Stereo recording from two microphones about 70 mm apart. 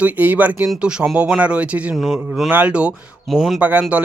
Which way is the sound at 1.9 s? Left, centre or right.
Centre.